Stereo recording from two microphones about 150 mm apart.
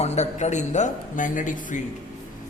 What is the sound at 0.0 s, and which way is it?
Speech, 45° left (ahead or behind).